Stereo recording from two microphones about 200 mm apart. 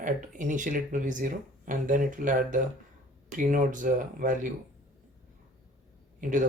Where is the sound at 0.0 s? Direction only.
40° right (ahead or behind).